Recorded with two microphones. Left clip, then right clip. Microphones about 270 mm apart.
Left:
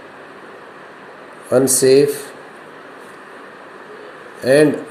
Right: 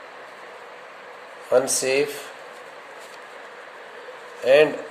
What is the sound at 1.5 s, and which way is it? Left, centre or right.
Speech, centre.